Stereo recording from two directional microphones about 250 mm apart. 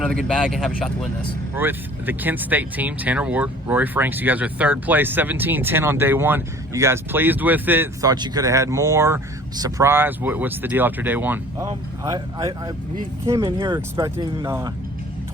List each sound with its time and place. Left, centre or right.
0.0 s speech: centre